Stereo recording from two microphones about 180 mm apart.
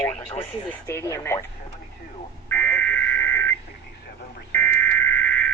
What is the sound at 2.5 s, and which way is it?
Fire alarm, 10° left (ahead or behind).